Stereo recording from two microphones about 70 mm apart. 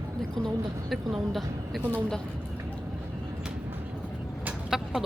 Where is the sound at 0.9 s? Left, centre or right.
Centre.